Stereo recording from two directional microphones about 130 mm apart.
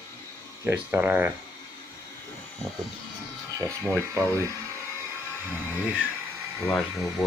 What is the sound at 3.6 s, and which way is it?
Speech, 25° right (ahead or behind).